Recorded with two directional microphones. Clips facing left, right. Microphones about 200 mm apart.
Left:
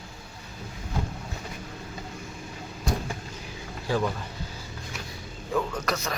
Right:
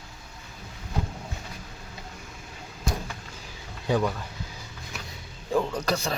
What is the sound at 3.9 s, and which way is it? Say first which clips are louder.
Speech: right 2 dB; 20° right (ahead or behind).